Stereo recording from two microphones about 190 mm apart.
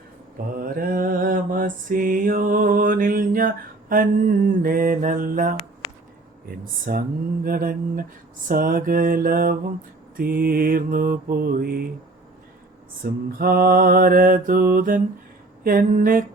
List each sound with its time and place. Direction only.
0.6 s mantra: 50° right (ahead or behind)
6.9 s mantra: 50° right (ahead or behind)
13.0 s mantra: 50° right (ahead or behind)